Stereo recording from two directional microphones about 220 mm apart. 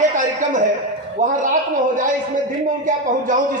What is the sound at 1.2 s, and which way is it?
Speech, 35° right (ahead or behind).